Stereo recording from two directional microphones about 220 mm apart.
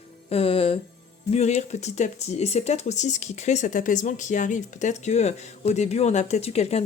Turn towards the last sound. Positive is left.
turn(degrees=30)  # may be behind; listen again after turning